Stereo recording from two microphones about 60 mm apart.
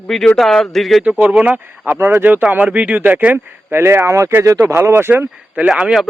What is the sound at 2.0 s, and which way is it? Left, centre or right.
Speech, right.